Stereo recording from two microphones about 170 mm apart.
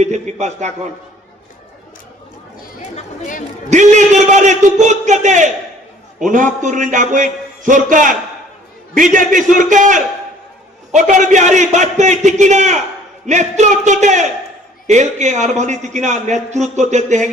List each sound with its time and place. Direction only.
0.0 s a man's voice: 45° right (ahead or behind)
2.9 s speech: 50° left (ahead or behind)
3.7 s a man's voice: 45° right (ahead or behind)